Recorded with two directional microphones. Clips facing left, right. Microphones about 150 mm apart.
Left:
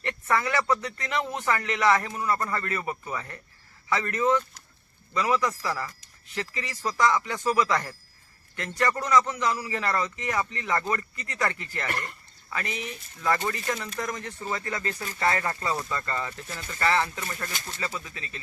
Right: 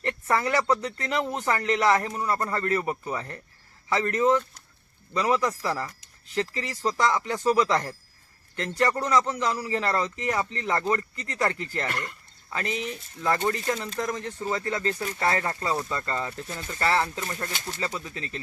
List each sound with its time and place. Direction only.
0.0 s a man's voice: 35° right (ahead or behind)